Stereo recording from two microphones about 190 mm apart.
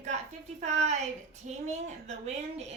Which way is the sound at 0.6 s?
35° right (ahead or behind).